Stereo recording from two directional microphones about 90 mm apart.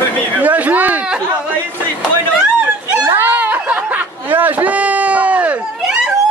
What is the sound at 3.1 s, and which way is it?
Chatter, 20° right (ahead or behind).